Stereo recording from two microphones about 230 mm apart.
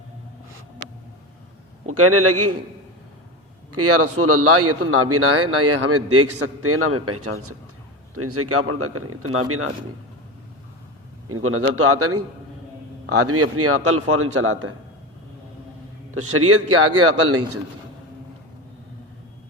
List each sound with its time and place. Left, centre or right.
1.9 s a man's voice: right
3.7 s a man's voice: right
11.3 s a man's voice: right
16.1 s a man's voice: right